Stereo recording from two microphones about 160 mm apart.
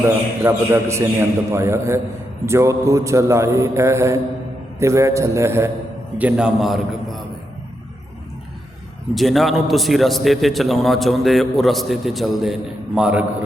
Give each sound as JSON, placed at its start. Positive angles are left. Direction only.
{"t": 0.0, "sound": "a man's voice", "side_deg": -15}
{"t": 9.1, "sound": "a man's voice", "side_deg": 0}